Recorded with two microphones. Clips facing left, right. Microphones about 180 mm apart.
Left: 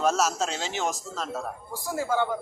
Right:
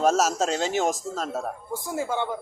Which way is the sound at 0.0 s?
45° right (ahead or behind).